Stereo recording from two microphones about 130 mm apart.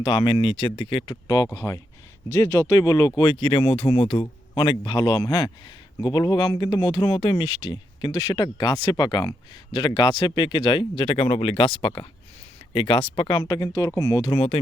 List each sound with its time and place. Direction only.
0.0 s speech: 40° left (ahead or behind)
1.1 s speech: 30° left (ahead or behind)
14.3 s speech: 45° left (ahead or behind)